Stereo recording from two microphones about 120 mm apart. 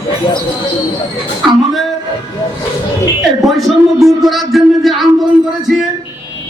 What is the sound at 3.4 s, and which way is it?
Speech, centre (ahead or behind).